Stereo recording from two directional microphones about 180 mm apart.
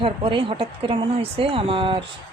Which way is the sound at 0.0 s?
30° right (ahead or behind).